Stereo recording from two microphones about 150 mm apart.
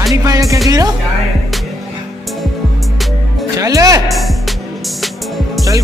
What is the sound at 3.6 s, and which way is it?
Speech, 20° right (ahead or behind).